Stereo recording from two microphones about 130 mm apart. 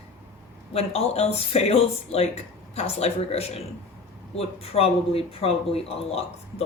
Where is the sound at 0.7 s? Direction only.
50° left (ahead or behind).